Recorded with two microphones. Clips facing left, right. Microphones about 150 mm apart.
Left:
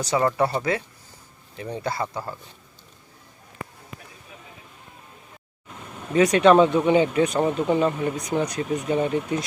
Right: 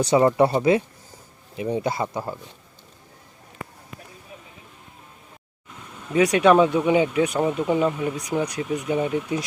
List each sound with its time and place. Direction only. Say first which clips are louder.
0.0 s speech: right 5 dB; 25° right (ahead or behind)
6.1 s speech: left 1 dB; 10° right (ahead or behind)